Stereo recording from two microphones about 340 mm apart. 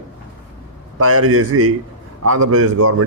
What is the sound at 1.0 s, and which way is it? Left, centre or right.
A man's voice, right.